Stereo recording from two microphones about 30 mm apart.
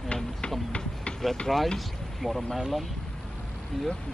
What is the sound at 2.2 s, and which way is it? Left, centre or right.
Speech, centre.